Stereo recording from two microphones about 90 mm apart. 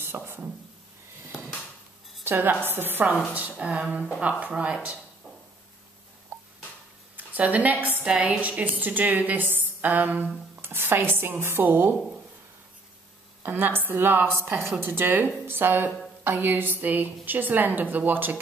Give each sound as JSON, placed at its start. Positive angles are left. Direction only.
{"t": 0.0, "sound": "a sound", "side_deg": -25}
{"t": 2.2, "sound": "a woman's voice", "side_deg": -20}
{"t": 7.2, "sound": "a woman's voice", "side_deg": -15}
{"t": 13.4, "sound": "a woman's voice", "side_deg": -25}